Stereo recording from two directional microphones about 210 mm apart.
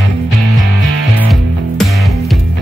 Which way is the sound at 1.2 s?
Centre (ahead or behind).